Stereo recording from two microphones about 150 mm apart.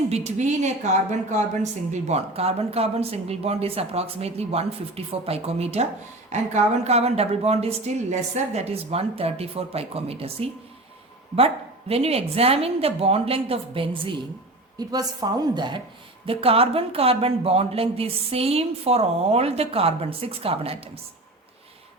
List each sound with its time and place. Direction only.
0.1 s a woman's voice: 50° right (ahead or behind)